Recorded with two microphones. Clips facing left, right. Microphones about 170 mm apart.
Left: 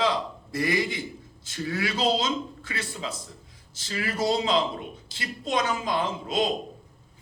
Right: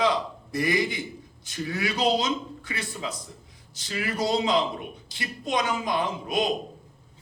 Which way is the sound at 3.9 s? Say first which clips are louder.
Even; 20° right (ahead or behind).